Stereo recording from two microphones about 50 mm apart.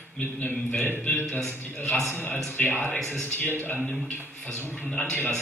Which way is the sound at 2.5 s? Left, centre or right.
Left.